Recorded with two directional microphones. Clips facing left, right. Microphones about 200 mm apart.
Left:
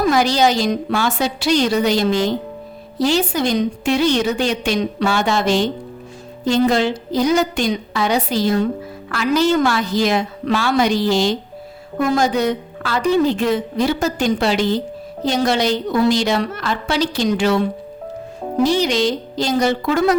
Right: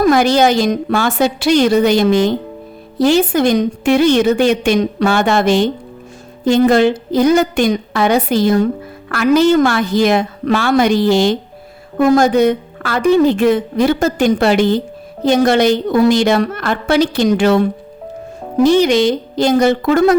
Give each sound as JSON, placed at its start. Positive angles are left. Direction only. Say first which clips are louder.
{"t": 0.0, "sound": "a woman's voice", "louder": "right 4 dB", "side_deg": -55}